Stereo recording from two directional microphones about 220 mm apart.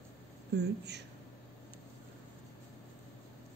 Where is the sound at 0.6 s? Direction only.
50° right (ahead or behind).